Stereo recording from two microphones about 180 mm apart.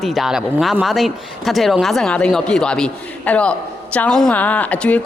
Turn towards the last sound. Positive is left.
turn(degrees=10)  # may be behind; listen again after turning